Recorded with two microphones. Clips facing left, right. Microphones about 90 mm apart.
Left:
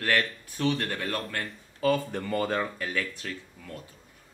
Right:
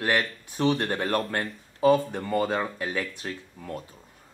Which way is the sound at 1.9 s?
10° right (ahead or behind).